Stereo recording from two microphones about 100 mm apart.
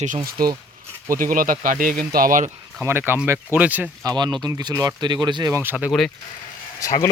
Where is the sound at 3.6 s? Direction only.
15° right (ahead or behind).